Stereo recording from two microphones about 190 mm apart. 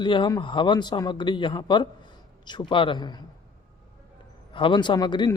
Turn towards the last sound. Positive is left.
turn(degrees=25)  # may be behind; listen again after turning